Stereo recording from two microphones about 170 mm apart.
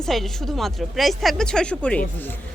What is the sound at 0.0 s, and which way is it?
A woman's voice, centre (ahead or behind).